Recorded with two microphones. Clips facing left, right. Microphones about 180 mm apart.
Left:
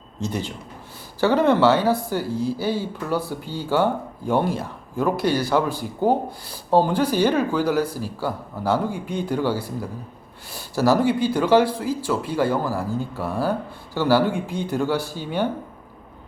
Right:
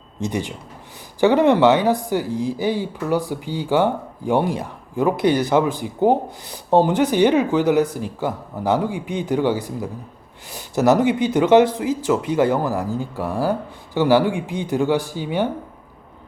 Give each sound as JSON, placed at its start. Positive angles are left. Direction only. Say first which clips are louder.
{"t": 0.2, "sound": "a man's voice", "louder": "right 3 dB", "side_deg": -15}